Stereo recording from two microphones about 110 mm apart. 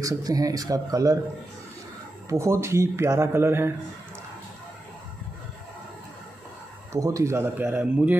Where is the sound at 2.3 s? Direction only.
25° right (ahead or behind).